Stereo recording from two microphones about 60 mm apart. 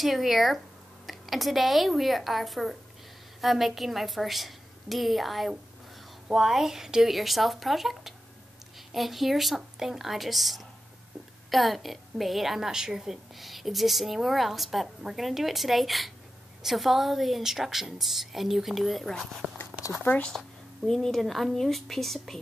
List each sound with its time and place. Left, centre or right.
0.0 s a woman's voice: centre